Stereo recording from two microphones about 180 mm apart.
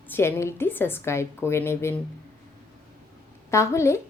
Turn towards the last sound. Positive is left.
turn(degrees=15)  # may be behind; listen again after turning